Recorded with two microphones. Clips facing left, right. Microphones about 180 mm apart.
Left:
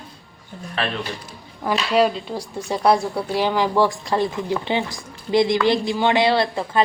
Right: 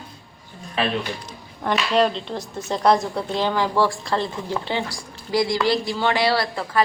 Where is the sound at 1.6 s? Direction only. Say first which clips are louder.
Left 1 dB; 5° left (ahead or behind).